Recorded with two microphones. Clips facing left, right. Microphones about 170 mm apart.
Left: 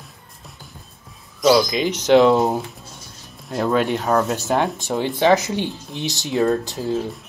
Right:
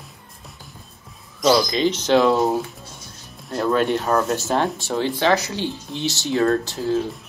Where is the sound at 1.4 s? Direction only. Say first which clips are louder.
Left 1 dB; 10° left (ahead or behind).